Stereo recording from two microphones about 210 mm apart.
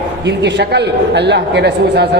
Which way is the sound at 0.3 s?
55° right (ahead or behind).